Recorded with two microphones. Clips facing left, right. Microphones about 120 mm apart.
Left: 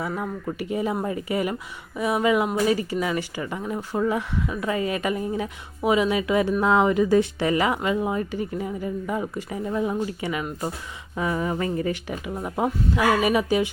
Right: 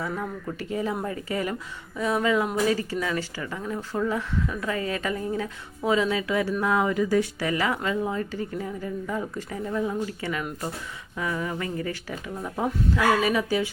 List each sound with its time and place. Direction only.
0.0 s speech: 15° left (ahead or behind)